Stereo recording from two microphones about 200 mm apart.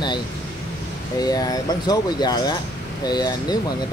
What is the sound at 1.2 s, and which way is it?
Speech, 20° left (ahead or behind).